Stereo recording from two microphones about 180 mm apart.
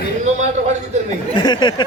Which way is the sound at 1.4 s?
25° left (ahead or behind).